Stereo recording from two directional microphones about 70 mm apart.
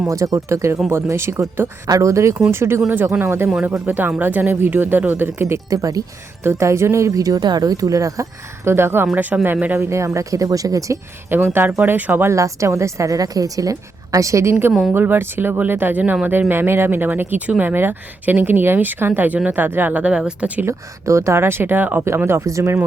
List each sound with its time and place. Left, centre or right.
0.1 s speech: right
5.7 s speech: right
6.4 s speech: right
9.9 s speech: right
11.3 s speech: right
12.3 s speech: right
14.9 s speech: right
16.5 s speech: right; by 20.5 s centre
20.7 s speech: right
22.2 s speech: right
22.4 s speech: right